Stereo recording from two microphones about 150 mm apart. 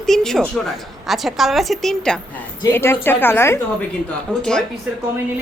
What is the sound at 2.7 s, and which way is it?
Speech, 15° left (ahead or behind).